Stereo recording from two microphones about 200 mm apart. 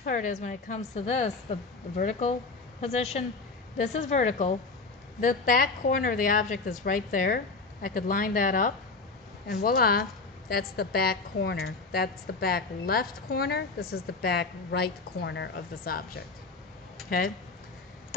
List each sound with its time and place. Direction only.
0.0 s a woman's voice: 40° left (ahead or behind); by 15.5 s 60° left (ahead or behind)
15.5 s a woman's voice: 45° left (ahead or behind)